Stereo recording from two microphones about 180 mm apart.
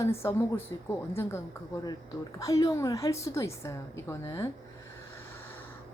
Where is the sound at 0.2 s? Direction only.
15° left (ahead or behind).